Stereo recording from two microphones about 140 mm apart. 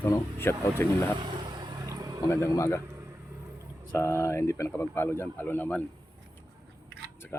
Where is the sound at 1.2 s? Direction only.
35° right (ahead or behind).